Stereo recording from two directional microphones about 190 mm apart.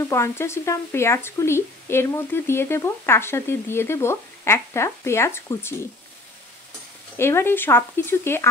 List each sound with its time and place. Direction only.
0.0 s speech: 15° left (ahead or behind)
7.2 s speech: 15° left (ahead or behind)